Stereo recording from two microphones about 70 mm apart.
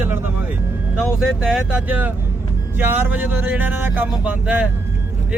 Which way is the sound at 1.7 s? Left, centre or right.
Right.